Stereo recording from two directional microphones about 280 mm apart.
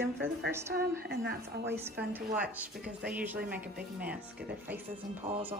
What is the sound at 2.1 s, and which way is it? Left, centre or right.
Speech, centre.